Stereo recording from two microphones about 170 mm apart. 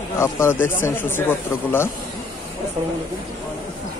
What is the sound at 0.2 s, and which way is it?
Speech, 15° left (ahead or behind).